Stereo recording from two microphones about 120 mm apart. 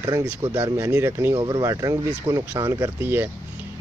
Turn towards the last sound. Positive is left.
turn(degrees=-20)  # may be behind; listen again after turning